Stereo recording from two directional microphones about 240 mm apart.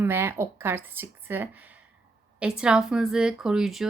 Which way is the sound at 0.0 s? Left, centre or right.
Centre.